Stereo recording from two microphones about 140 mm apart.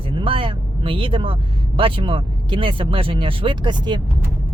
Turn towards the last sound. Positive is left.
turn(degrees=-30)  # may be behind; listen again after turning